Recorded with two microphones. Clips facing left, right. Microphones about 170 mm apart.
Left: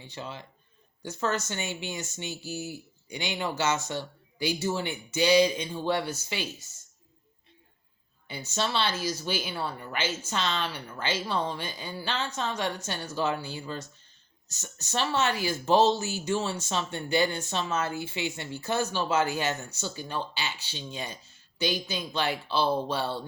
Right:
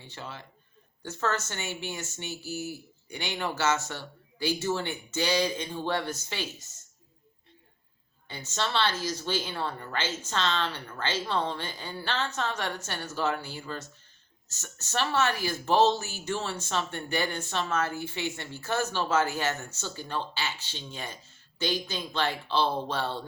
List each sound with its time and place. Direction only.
0.0 s speech: 15° left (ahead or behind)
8.3 s speech: 10° left (ahead or behind)